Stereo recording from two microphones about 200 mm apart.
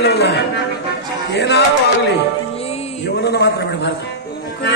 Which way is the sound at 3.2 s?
55° left (ahead or behind).